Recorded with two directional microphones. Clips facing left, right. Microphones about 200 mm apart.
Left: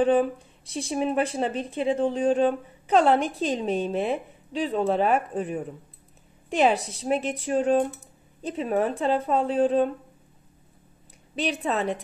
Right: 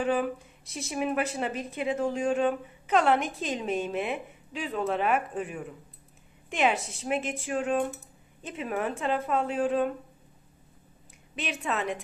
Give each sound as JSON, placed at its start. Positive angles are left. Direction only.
{"t": 0.0, "sound": "speech", "side_deg": 30}
{"t": 11.3, "sound": "speech", "side_deg": 35}